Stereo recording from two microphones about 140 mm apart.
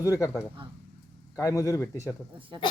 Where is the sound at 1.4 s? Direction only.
25° left (ahead or behind).